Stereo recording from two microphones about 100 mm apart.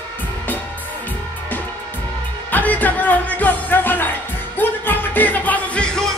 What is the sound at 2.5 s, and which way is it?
Music, 15° left (ahead or behind).